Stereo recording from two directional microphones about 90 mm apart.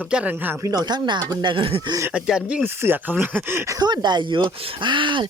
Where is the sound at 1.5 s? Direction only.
85° right.